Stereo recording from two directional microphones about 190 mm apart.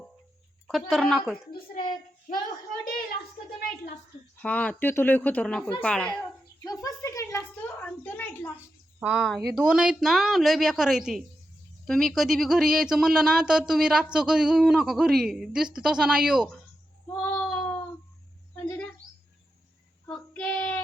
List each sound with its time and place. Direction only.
0.7 s speech: centre (ahead or behind)
1.8 s a child's voice: 25° left (ahead or behind)
4.4 s speech: 10° left (ahead or behind)
6.7 s a sound: 20° left (ahead or behind)
9.0 s speech: centre (ahead or behind)
17.2 s a sound: 10° left (ahead or behind)
20.1 s child singing: 5° left (ahead or behind)